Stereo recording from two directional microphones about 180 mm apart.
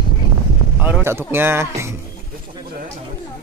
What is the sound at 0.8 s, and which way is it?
Speech, 10° right (ahead or behind).